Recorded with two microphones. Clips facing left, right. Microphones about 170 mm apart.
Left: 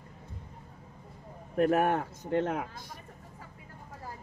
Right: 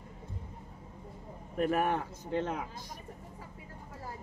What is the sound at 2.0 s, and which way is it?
Speech, 65° left (ahead or behind).